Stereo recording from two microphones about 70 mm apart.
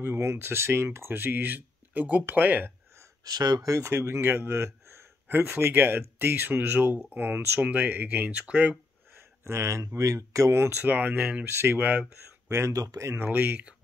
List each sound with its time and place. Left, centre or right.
0.0 s speech: right
3.3 s speech: right
3.9 s speech: right
4.5 s a sound: right
5.6 s speech: right
9.1 s speech: right
10.8 s speech: right
11.4 s speech: right
11.8 s speech: right
12.4 s speech: right
13.2 s speech: right